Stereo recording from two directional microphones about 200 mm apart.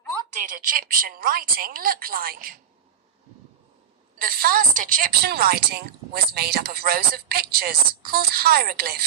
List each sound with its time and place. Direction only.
0.3 s a woman's voice: 40° right (ahead or behind)
4.2 s a woman's voice: 45° right (ahead or behind)